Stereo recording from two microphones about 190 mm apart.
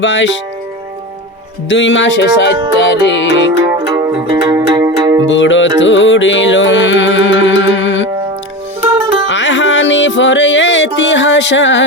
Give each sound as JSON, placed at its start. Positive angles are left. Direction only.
{"t": 0.0, "sound": "music", "side_deg": 70}
{"t": 1.7, "sound": "music", "side_deg": 70}
{"t": 3.6, "sound": "music", "side_deg": -20}
{"t": 5.3, "sound": "music", "side_deg": 75}
{"t": 9.2, "sound": "music", "side_deg": 75}